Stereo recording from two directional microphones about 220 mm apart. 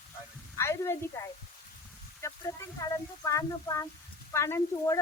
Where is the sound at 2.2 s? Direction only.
15° left (ahead or behind).